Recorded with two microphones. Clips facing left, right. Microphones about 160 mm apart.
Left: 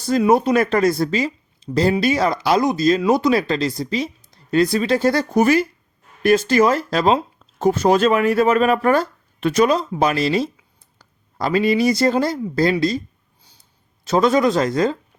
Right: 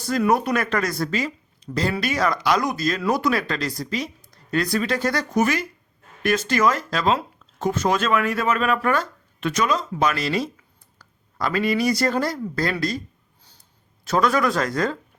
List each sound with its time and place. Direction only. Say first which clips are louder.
0.2 s speech: left 5 dB; 25° left (ahead or behind)
10.9 s a sound: left 3 dB; 30° left (ahead or behind)
11.9 s speech: left 4 dB; 25° left (ahead or behind)
14.0 s speech: left 4 dB; 25° left (ahead or behind)